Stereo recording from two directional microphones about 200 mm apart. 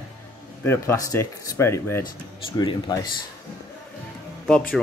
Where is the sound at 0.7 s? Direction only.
15° left (ahead or behind).